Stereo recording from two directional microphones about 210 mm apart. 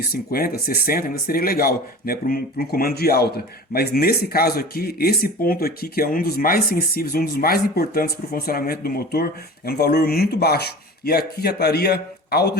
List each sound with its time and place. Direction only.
0.0 s speech: 45° left (ahead or behind)